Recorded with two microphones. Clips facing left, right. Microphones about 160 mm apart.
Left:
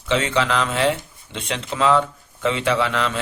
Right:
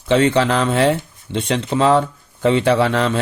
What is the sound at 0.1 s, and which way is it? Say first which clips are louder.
Speech: right 6 dB; 35° right (ahead or behind).